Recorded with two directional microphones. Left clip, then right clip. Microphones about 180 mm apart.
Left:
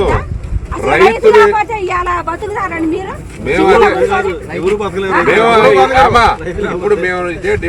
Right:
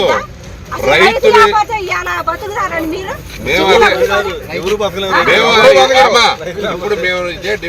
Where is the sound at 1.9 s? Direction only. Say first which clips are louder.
Left 3 dB; 40° left (ahead or behind).